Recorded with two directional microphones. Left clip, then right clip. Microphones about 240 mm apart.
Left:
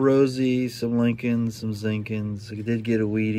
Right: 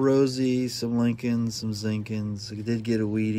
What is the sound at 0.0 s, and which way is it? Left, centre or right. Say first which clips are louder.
Speech: left 2 dB; centre.